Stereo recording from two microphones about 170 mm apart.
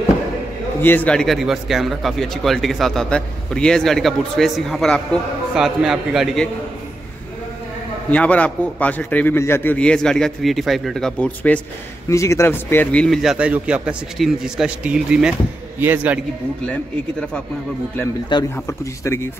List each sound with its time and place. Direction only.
0.7 s a man's voice: 10° left (ahead or behind)
8.1 s a man's voice: 10° left (ahead or behind)
12.1 s a man's voice: 15° left (ahead or behind); by 16.2 s 10° right (ahead or behind)
18.3 s a man's voice: 15° left (ahead or behind)